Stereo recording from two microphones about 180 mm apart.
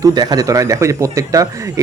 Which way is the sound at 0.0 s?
20° right (ahead or behind).